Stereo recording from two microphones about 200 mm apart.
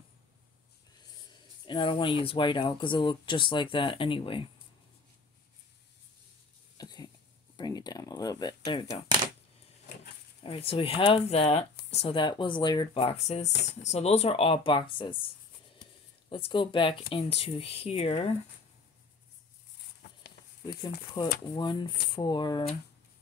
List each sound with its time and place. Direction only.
1.7 s speech: 25° left (ahead or behind)
6.8 s a sound: 20° left (ahead or behind)
10.4 s speech: 30° left (ahead or behind)
16.3 s speech: 25° left (ahead or behind)
21.2 s speech: 25° left (ahead or behind)